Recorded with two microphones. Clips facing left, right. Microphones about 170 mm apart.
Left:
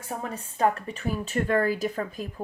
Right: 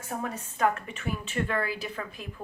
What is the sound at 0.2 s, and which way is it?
A woman's voice, 35° left (ahead or behind).